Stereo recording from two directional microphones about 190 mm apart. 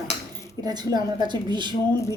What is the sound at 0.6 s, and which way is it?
A woman's voice, 20° right (ahead or behind).